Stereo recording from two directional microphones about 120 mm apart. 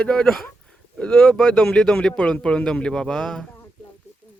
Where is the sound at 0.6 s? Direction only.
5° left (ahead or behind).